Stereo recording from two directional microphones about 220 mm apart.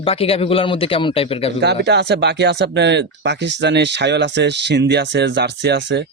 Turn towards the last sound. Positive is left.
turn(degrees=-50)  # may be behind; listen again after turning